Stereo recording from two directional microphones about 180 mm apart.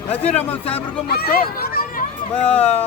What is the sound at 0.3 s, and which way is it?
Speech, 10° left (ahead or behind).